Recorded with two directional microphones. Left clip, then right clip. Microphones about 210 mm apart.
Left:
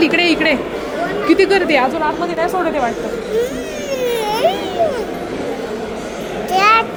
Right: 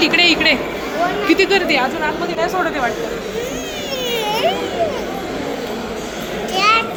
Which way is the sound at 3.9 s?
45° left (ahead or behind).